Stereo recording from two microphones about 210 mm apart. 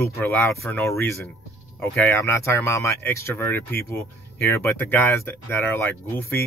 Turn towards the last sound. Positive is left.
turn(degrees=10)  # may be behind; listen again after turning